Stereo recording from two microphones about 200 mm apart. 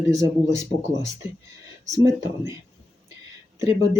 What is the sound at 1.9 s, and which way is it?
Speech, 15° right (ahead or behind).